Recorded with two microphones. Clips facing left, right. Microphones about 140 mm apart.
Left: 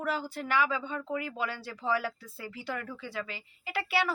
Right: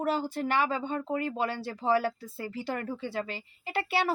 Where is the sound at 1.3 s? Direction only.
25° right (ahead or behind).